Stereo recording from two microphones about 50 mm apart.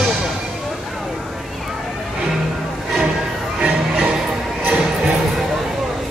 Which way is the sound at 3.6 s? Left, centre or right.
Right.